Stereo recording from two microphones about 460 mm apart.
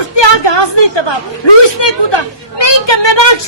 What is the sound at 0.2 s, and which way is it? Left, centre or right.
A woman's voice, left.